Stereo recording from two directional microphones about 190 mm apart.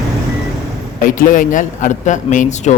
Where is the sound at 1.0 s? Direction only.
45° left (ahead or behind).